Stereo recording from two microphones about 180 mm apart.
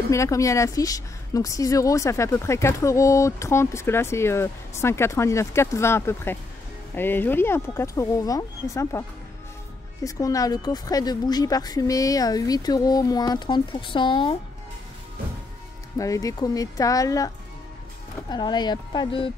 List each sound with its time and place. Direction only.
0.1 s a woman's voice: 15° left (ahead or behind)
10.0 s a woman's voice: 20° left (ahead or behind)
16.0 s a woman's voice: 20° left (ahead or behind)
18.3 s a woman's voice: 25° left (ahead or behind)